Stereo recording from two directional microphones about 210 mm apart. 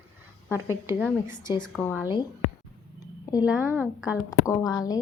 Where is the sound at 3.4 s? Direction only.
5° right (ahead or behind).